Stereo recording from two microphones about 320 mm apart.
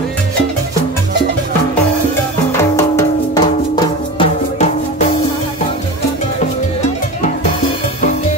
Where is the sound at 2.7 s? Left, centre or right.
Centre.